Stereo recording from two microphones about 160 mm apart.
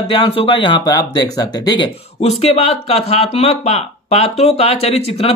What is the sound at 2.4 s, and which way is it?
A man's voice, 40° left (ahead or behind).